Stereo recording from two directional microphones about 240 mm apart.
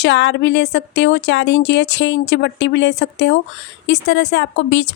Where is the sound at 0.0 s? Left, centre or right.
Left.